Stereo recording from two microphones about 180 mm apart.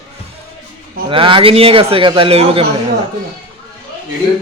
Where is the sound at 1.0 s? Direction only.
30° right (ahead or behind).